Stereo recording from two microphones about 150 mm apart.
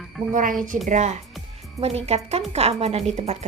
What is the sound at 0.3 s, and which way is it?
Speech, 65° right (ahead or behind).